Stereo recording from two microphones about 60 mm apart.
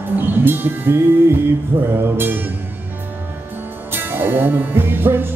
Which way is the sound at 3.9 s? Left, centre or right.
Right.